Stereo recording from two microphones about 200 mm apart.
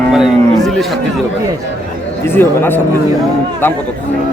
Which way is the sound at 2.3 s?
10° left (ahead or behind).